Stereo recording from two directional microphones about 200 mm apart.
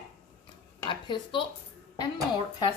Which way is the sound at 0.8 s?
25° left (ahead or behind).